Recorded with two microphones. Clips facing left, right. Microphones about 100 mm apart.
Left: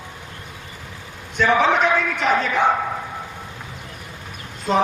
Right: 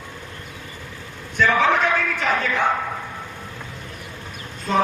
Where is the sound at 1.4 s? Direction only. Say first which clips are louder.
Left 1 dB; 20° left (ahead or behind).